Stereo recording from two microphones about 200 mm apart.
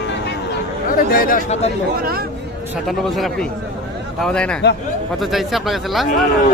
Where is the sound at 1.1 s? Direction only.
45° left (ahead or behind).